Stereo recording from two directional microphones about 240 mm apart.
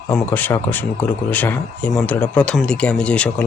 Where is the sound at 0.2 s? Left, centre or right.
Centre.